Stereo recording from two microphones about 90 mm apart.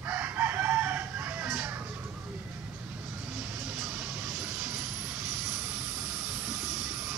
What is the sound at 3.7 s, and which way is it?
Vehicle, 15° right (ahead or behind).